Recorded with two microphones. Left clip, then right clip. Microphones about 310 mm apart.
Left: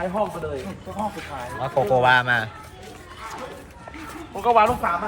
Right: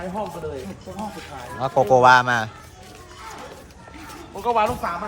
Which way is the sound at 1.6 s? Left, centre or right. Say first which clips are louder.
Right 4 dB; right.